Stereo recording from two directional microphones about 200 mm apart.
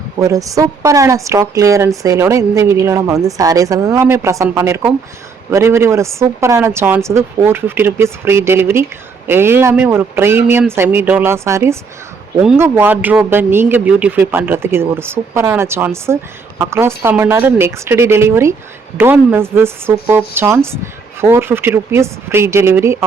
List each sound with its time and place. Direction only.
0.2 s a woman's voice: 15° right (ahead or behind)